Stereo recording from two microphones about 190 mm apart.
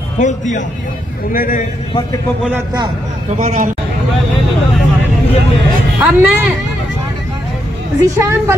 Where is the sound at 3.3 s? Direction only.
40° right (ahead or behind).